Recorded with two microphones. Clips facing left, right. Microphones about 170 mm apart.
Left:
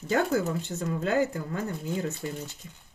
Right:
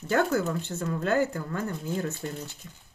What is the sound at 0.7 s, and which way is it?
Speech, 15° left (ahead or behind).